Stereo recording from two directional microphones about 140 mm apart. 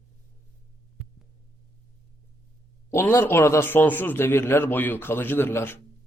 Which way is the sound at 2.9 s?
20° left (ahead or behind).